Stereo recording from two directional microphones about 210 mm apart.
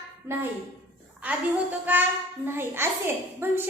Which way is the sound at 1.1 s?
5° right (ahead or behind).